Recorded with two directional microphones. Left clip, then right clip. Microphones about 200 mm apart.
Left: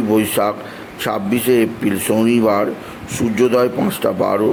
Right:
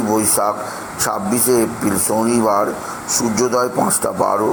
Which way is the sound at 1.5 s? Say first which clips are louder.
Left 1 dB; 15° right (ahead or behind).